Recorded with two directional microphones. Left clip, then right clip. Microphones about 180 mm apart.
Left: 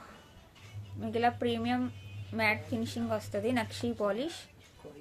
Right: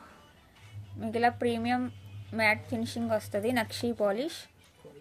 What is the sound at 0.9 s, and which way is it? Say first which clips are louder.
A woman's voice: right 2 dB; 35° right (ahead or behind).